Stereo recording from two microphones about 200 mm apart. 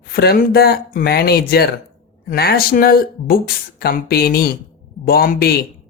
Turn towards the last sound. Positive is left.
turn(degrees=50)  # may be behind; listen again after turning